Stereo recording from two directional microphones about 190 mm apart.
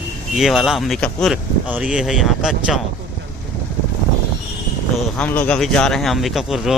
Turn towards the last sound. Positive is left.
turn(degrees=0)  # may be behind; listen again after turning